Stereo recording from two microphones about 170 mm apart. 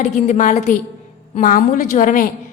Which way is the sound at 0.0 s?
45° left (ahead or behind).